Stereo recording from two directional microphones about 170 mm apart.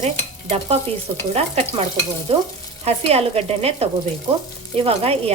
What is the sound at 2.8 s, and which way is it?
A woman's voice, 35° right (ahead or behind).